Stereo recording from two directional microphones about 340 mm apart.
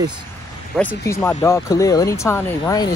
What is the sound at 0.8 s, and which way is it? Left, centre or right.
Speech, centre.